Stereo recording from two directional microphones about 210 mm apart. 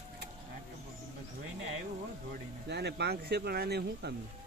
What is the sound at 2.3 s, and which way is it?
Speech, 50° right (ahead or behind).